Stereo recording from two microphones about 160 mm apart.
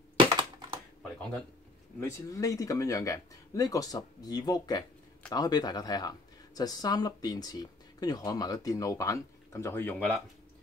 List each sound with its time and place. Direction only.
0.2 s computer keyboard: 30° right (ahead or behind)
2.0 s speech: 20° left (ahead or behind)